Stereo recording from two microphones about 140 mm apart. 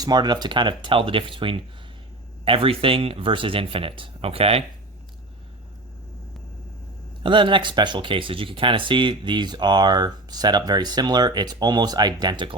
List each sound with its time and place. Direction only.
0.0 s speech: 30° right (ahead or behind)
7.2 s speech: 35° right (ahead or behind)